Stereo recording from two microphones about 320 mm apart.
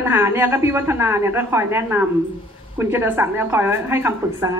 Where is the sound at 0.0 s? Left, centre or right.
Centre.